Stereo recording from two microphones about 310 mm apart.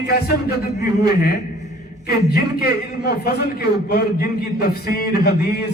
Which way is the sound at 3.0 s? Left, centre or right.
Left.